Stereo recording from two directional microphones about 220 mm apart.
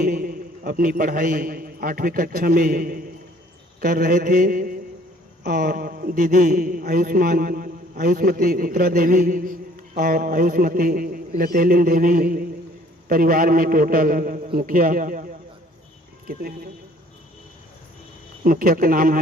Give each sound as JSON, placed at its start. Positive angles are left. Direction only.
{"t": 0.0, "sound": "a man's voice", "side_deg": -40}
{"t": 18.4, "sound": "a man's voice", "side_deg": -40}